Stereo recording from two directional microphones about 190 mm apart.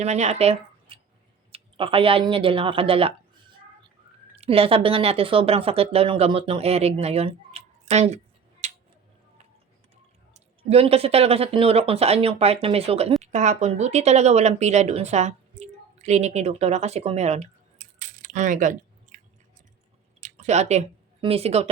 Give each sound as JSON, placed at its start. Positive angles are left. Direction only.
{"t": 0.0, "sound": "speech", "side_deg": -35}
{"t": 4.4, "sound": "speech", "side_deg": -30}
{"t": 8.6, "sound": "a sound", "side_deg": -35}
{"t": 10.3, "sound": "speech", "side_deg": -30}
{"t": 20.2, "sound": "speech", "side_deg": -35}